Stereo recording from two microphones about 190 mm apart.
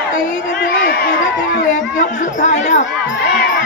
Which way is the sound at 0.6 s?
50° left (ahead or behind).